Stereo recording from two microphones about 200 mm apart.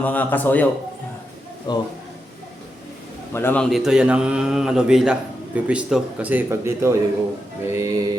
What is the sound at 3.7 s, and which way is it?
A man's voice, centre (ahead or behind).